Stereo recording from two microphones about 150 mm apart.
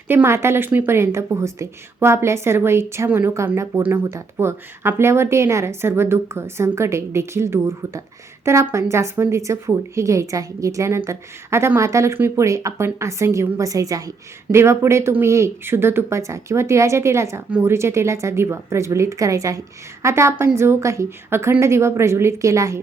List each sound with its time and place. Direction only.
0.1 s a woman's voice: 15° right (ahead or behind)